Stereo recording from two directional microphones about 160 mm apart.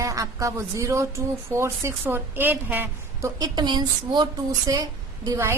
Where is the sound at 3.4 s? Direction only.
30° right (ahead or behind).